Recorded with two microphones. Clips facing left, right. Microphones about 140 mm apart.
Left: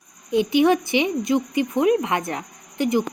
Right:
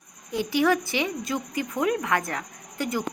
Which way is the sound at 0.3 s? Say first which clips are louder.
Left 6 dB; 20° left (ahead or behind).